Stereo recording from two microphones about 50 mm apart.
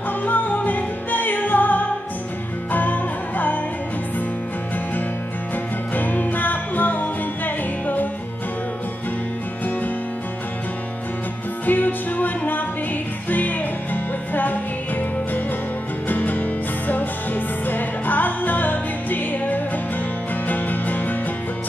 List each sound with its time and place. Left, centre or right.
0.2 s music: left
5.9 s music: left
11.6 s music: left